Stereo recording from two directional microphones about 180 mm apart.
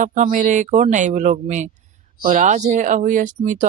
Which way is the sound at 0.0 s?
45° right (ahead or behind).